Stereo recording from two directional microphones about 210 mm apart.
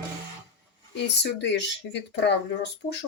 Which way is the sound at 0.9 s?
55° left (ahead or behind).